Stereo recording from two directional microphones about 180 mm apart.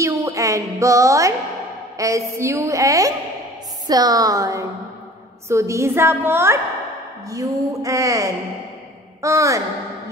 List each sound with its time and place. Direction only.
0.0 s a woman's voice: 15° right (ahead or behind)